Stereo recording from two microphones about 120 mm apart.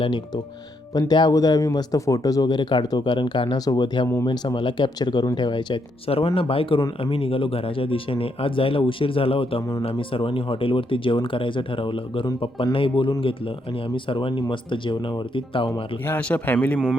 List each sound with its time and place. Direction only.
0.9 s speech: 35° left (ahead or behind)
16.0 s a man's voice: 15° left (ahead or behind)